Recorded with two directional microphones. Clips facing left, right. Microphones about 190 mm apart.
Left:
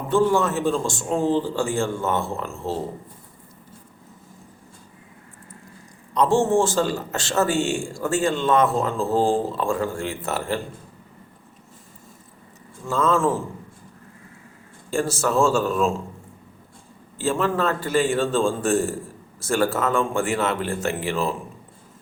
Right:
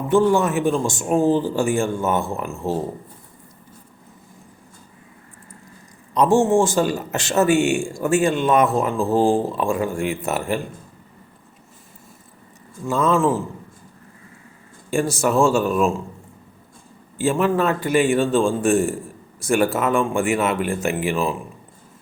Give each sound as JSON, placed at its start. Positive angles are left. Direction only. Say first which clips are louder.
{"t": 0.1, "sound": "a man's voice", "louder": "right 3 dB", "side_deg": -15}
{"t": 6.1, "sound": "a man's voice", "louder": "right 3 dB", "side_deg": -15}
{"t": 12.9, "sound": "a man's voice", "louder": "right 2 dB", "side_deg": -15}
{"t": 14.8, "sound": "a man's voice", "louder": "right 3 dB", "side_deg": -15}
{"t": 17.2, "sound": "a man's voice", "louder": "right 3 dB", "side_deg": -15}